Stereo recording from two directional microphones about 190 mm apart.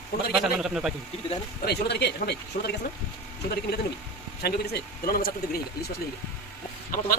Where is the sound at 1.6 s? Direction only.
60° left (ahead or behind).